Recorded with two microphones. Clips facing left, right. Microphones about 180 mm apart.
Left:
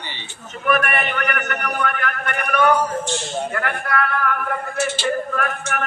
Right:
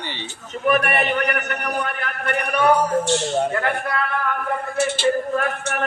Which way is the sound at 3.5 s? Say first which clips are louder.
Right 1 dB; 25° right (ahead or behind).